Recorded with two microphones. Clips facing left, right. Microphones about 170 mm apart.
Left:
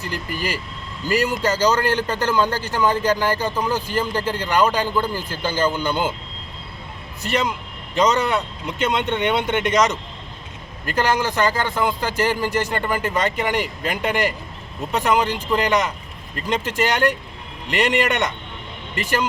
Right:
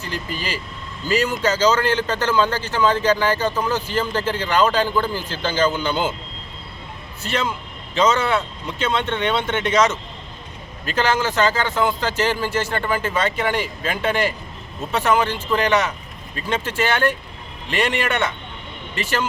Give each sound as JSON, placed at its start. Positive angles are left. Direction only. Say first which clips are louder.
{"t": 1.0, "sound": "speech", "louder": "even", "side_deg": 10}
{"t": 7.2, "sound": "speech", "louder": "left 2 dB", "side_deg": 15}